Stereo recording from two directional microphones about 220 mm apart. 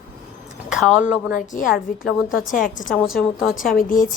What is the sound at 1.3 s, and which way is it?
Speech, 35° left (ahead or behind).